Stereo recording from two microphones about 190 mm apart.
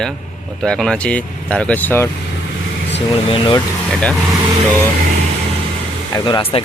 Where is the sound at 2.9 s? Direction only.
30° left (ahead or behind).